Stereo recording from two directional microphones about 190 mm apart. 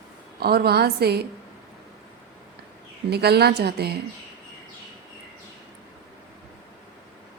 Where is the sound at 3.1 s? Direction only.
60° right (ahead or behind).